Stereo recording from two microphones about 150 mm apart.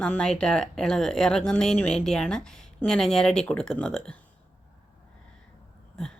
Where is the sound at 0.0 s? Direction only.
5° left (ahead or behind).